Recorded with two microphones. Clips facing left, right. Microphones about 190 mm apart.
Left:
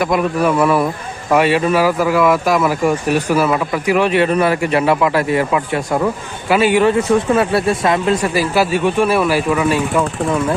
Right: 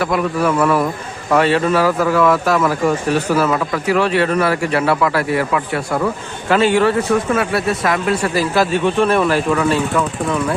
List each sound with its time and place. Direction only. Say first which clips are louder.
0.0 s speech: left 2 dB; 15° left (ahead or behind)
7.1 s speech: left 3 dB; 30° left (ahead or behind); by 10.0 s 10° left (ahead or behind)